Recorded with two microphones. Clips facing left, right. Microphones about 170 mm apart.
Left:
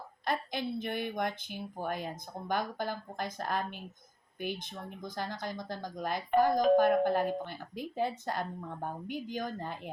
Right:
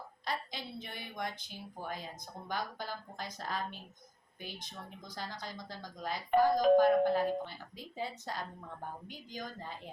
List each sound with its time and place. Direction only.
0.3 s a woman's voice: 55° left (ahead or behind)
6.5 s speech: centre (ahead or behind)
6.7 s a woman's voice: 55° left (ahead or behind)